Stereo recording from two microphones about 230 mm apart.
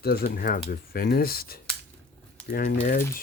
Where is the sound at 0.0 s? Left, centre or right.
Left.